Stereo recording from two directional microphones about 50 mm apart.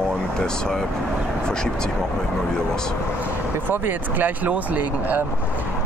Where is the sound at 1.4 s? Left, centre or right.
Centre.